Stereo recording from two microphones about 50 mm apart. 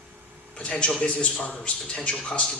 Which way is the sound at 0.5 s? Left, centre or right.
Left.